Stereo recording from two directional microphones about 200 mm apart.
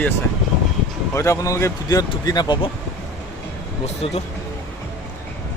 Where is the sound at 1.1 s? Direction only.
15° left (ahead or behind).